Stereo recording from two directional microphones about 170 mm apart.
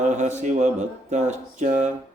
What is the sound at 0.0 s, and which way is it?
Mantra, 45° right (ahead or behind).